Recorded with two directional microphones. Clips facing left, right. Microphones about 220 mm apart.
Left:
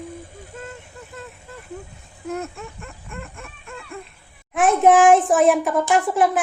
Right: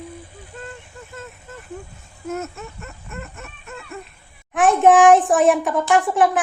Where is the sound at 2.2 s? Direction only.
5° right (ahead or behind).